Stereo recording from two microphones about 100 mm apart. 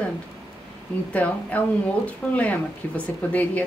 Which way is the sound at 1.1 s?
15° left (ahead or behind).